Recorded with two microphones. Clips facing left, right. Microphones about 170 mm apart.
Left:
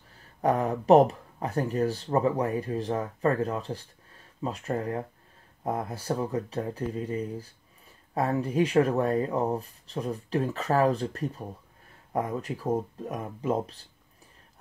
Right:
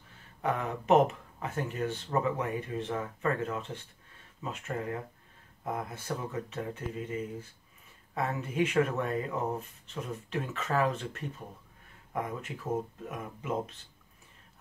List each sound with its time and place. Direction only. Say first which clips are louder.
0.1 s speech: left 7 dB; 35° left (ahead or behind)